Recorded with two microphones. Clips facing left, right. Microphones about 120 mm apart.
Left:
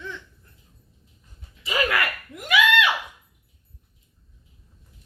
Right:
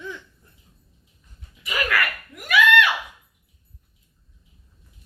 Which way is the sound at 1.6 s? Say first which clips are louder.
Left 1 dB; 25° left (ahead or behind).